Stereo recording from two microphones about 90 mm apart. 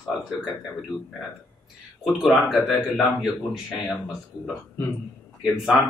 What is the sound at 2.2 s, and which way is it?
Speech, 5° right (ahead or behind).